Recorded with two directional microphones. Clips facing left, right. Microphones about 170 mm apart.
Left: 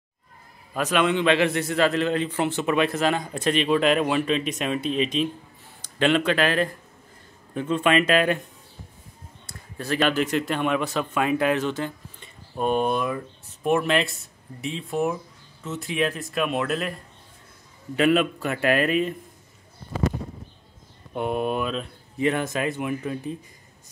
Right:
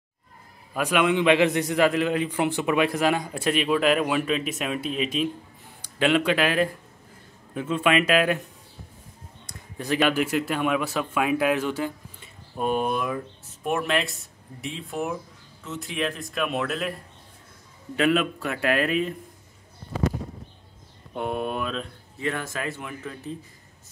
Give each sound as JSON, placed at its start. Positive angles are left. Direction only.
{"t": 0.7, "sound": "a man's voice", "side_deg": -10}
{"t": 9.5, "sound": "speech", "side_deg": -15}
{"t": 17.9, "sound": "speech", "side_deg": 0}
{"t": 21.1, "sound": "speech", "side_deg": 0}
{"t": 22.2, "sound": "speech", "side_deg": 20}